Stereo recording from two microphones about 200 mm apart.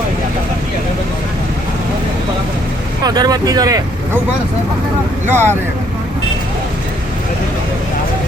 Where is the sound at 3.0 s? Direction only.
20° right (ahead or behind).